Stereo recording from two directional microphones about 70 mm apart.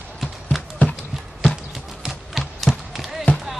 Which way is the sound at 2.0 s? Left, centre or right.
Centre.